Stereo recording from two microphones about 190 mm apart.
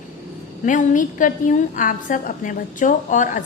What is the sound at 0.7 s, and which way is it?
A woman's voice, 40° left (ahead or behind).